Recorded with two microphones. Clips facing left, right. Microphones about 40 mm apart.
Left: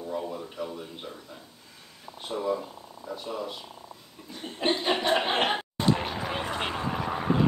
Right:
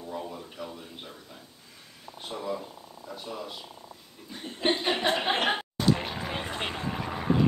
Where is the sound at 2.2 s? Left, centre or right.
Centre.